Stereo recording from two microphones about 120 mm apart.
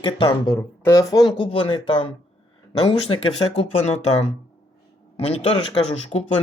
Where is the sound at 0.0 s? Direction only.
40° left (ahead or behind).